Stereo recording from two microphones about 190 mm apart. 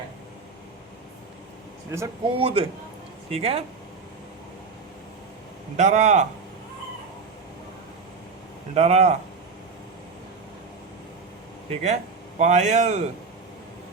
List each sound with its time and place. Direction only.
1.9 s speech: 15° right (ahead or behind)
2.3 s a man's voice: 30° right (ahead or behind)
5.7 s a man's voice: 40° right (ahead or behind)
8.7 s a man's voice: 35° right (ahead or behind)
11.7 s a man's voice: 35° right (ahead or behind)